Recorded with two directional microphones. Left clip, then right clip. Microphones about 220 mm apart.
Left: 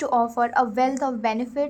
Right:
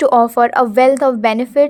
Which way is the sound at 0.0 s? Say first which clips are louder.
Right 11 dB; 45° right (ahead or behind).